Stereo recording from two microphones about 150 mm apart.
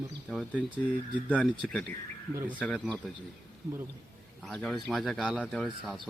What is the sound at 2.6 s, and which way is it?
Speech, 5° left (ahead or behind).